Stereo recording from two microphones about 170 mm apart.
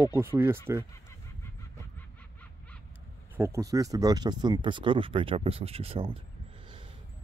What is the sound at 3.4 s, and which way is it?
Speech, 20° right (ahead or behind).